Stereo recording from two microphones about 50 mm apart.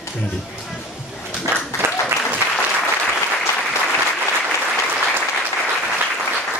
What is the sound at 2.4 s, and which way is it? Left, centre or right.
Applause, left.